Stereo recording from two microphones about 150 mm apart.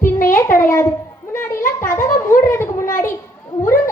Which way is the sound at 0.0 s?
65° left (ahead or behind).